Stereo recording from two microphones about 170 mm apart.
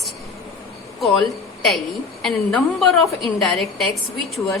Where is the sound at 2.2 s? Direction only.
Centre (ahead or behind).